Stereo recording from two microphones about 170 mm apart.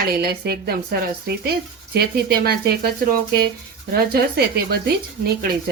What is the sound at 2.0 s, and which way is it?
Speech, 65° right (ahead or behind).